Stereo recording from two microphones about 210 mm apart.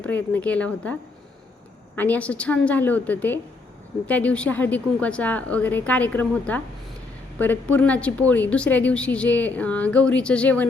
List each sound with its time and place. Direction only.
0.0 s a woman's voice: 5° left (ahead or behind)
2.0 s a woman's voice: 5° left (ahead or behind)